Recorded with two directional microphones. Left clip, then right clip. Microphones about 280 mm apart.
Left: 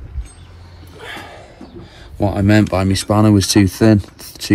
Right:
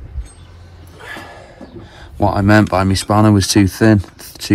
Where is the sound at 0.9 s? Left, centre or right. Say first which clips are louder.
Even; centre.